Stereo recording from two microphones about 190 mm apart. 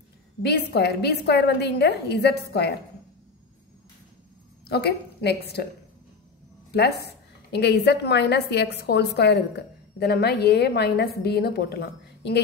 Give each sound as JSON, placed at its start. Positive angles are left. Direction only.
{"t": 0.4, "sound": "a woman's voice", "side_deg": 60}
{"t": 4.6, "sound": "a woman's voice", "side_deg": 55}
{"t": 6.7, "sound": "a woman's voice", "side_deg": 60}